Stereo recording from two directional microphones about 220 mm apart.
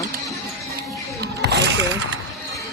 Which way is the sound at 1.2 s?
50° right (ahead or behind).